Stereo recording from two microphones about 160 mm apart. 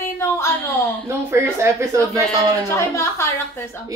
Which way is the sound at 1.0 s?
15° right (ahead or behind).